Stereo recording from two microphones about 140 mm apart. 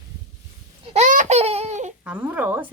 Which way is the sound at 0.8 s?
50° right (ahead or behind).